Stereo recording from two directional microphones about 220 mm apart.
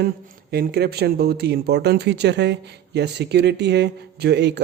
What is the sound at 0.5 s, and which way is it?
Speech, 45° right (ahead or behind).